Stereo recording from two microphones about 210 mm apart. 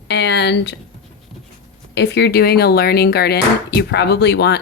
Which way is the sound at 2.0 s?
55° left (ahead or behind).